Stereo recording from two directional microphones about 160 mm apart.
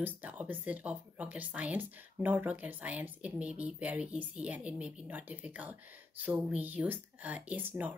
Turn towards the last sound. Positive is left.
turn(degrees=-10)  # may be behind; listen again after turning